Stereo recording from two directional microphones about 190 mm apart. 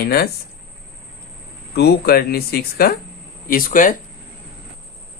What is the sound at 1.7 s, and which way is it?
Speech, 60° left (ahead or behind).